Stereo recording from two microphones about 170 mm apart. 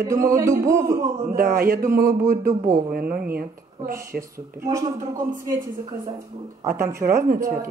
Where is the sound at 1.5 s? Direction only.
60° right (ahead or behind).